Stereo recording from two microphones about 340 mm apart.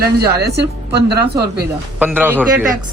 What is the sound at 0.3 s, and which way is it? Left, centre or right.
Speech, right.